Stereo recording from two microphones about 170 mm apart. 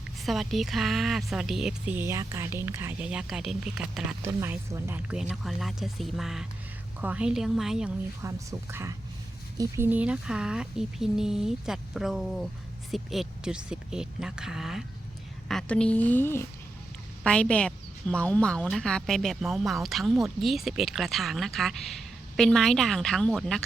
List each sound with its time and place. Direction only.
0.3 s speech: centre (ahead or behind)
8.2 s a woman's voice: 20° right (ahead or behind); by 23.6 s 5° left (ahead or behind)